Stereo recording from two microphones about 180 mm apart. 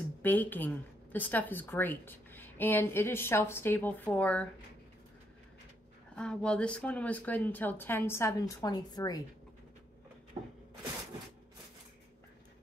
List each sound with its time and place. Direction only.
0.2 s a woman's voice: 10° left (ahead or behind)
6.1 s a woman's voice: 5° left (ahead or behind); by 9.2 s 20° left (ahead or behind)
10.4 s a sound: 35° right (ahead or behind)